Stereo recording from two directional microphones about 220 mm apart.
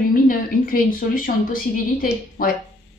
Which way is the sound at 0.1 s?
40° left (ahead or behind).